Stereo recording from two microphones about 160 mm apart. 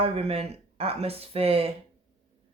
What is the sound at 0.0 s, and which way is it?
Speech, 40° right (ahead or behind).